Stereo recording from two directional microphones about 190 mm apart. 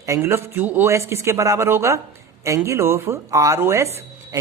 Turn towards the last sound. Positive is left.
turn(degrees=-15)  # may be behind; listen again after turning